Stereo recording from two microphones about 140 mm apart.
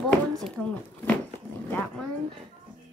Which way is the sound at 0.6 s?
10° left (ahead or behind).